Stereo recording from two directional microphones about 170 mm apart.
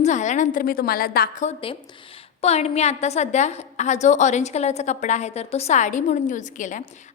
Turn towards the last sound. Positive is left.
turn(degrees=45)  # may be behind; listen again after turning